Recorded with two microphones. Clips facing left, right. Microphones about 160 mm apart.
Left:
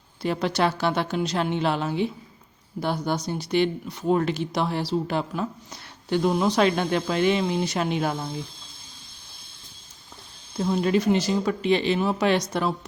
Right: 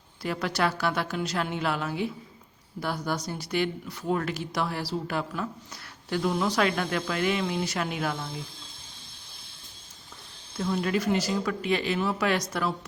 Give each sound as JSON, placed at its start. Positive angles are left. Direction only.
{"t": 0.2, "sound": "speech", "side_deg": 25}
{"t": 10.6, "sound": "speech", "side_deg": 25}